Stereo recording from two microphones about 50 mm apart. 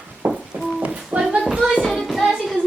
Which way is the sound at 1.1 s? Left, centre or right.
Right.